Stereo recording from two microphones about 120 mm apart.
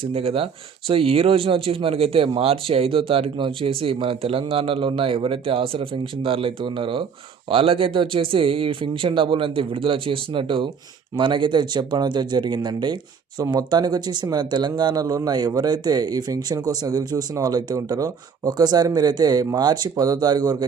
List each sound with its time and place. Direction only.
0.0 s speech: 50° right (ahead or behind); by 20.7 s 35° right (ahead or behind)